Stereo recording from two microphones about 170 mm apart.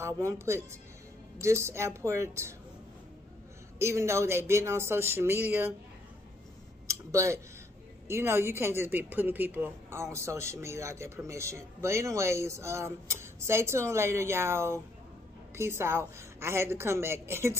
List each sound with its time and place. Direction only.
0.0 s a woman's voice: 15° right (ahead or behind)
3.8 s a woman's voice: 15° right (ahead or behind)
6.9 s a sound: 15° right (ahead or behind)
8.1 s a woman's voice: 15° right (ahead or behind)